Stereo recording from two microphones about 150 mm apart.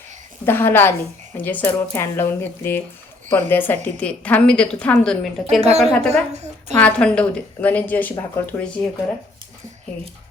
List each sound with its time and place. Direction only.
0.4 s a woman's voice: 15° left (ahead or behind)
5.5 s a woman's voice: 45° right (ahead or behind)
5.8 s a woman's voice: 5° left (ahead or behind)
6.3 s a woman's voice: 50° right (ahead or behind)
6.7 s a woman's voice: 10° left (ahead or behind)